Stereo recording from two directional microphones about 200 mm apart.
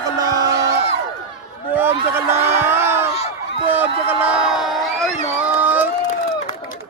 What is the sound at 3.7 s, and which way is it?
Crowd, 10° right (ahead or behind).